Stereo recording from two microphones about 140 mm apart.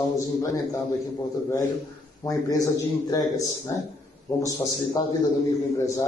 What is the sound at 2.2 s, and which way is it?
A man's voice, 25° left (ahead or behind).